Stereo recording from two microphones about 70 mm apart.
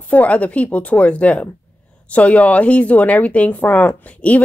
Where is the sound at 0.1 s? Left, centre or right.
Left.